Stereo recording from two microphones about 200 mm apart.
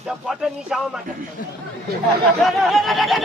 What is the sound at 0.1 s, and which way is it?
Speech, centre (ahead or behind).